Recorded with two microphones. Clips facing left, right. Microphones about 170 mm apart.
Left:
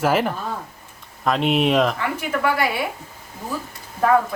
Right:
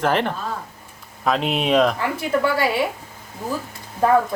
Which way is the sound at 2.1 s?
30° right (ahead or behind).